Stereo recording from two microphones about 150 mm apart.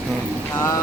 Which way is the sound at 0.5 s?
20° left (ahead or behind).